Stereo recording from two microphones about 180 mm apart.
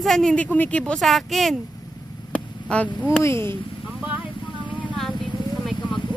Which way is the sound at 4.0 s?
10° right (ahead or behind).